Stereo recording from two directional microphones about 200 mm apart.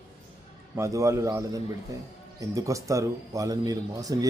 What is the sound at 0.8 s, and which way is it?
Speech, 15° right (ahead or behind).